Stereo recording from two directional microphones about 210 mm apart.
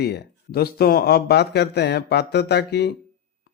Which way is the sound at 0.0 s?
50° left (ahead or behind).